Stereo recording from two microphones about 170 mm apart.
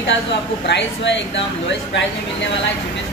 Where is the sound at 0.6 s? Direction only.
90° left.